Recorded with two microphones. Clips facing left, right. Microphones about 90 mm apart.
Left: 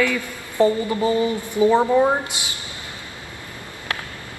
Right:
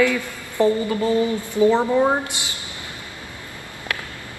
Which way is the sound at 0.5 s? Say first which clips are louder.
Left 1 dB; 15° left (ahead or behind).